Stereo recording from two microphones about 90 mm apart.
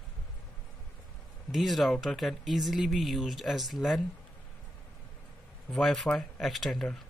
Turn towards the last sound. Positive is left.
turn(degrees=5)  # may be behind; listen again after turning